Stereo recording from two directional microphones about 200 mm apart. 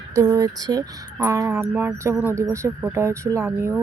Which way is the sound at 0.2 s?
15° right (ahead or behind).